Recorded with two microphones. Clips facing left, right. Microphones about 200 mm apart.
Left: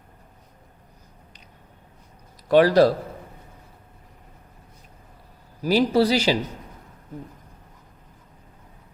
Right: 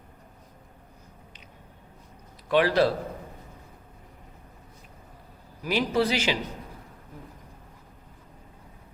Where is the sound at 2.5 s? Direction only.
40° left (ahead or behind).